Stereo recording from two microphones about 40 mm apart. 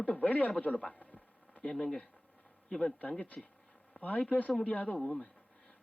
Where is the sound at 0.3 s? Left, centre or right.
Left.